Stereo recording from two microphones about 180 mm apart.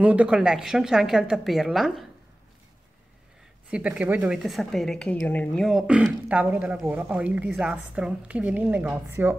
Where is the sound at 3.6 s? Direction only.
5° right (ahead or behind).